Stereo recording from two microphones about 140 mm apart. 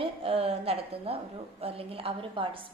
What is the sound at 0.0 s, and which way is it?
A woman's voice, 45° right (ahead or behind).